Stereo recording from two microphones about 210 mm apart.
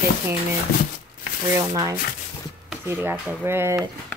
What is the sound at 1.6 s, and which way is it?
Speech, 20° right (ahead or behind).